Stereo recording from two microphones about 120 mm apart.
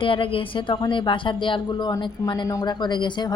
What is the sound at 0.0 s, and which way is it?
A woman's voice, 45° left (ahead or behind).